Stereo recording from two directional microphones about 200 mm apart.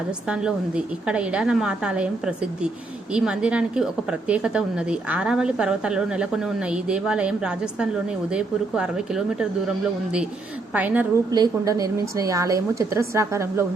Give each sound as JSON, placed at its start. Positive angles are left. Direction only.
{"t": 0.3, "sound": "a woman's voice", "side_deg": -5}